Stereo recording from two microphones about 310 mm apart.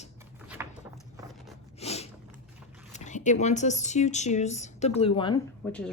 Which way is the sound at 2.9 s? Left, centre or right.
Left.